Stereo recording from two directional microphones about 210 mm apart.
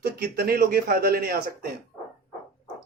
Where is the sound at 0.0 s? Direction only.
50° right (ahead or behind).